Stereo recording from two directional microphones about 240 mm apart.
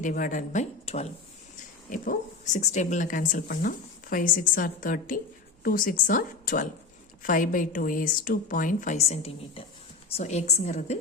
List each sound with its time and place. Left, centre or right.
0.0 s a woman's voice: left